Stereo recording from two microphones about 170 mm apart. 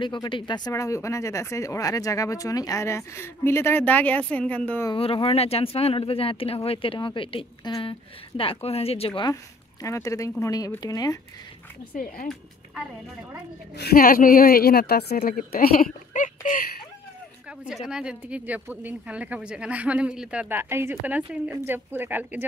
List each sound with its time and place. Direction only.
0.0 s a woman's voice: 30° left (ahead or behind); by 4.8 s 10° left (ahead or behind)
4.9 s speech: 35° left (ahead or behind)
9.3 s speech: 20° left (ahead or behind)
13.7 s a woman's voice: 65° left (ahead or behind)
17.8 s speech: 5° right (ahead or behind)